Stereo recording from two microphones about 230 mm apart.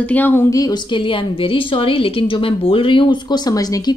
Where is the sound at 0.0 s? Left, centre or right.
Centre.